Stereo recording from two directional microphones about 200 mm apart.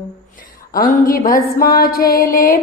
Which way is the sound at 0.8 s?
45° left (ahead or behind).